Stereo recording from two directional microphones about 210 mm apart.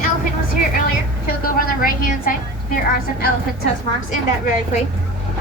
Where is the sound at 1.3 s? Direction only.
45° left (ahead or behind).